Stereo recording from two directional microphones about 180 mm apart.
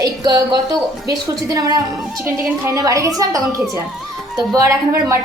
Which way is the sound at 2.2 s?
15° right (ahead or behind).